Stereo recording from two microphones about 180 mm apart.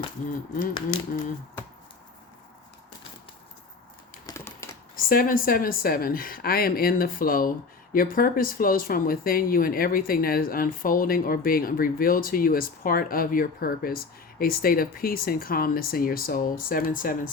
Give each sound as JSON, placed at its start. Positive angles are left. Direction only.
{"t": 0.3, "sound": "speech", "side_deg": 50}
{"t": 4.3, "sound": "typing", "side_deg": 15}
{"t": 4.9, "sound": "speech", "side_deg": 50}